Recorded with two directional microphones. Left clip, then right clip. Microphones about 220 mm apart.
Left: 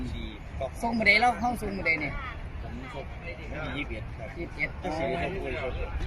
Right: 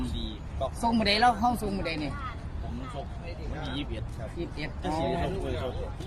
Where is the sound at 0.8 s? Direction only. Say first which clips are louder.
Left 2 dB; centre (ahead or behind).